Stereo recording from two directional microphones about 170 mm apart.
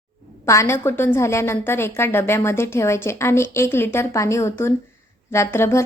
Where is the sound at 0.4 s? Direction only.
15° left (ahead or behind).